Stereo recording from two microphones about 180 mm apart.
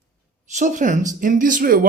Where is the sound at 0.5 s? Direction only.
45° right (ahead or behind).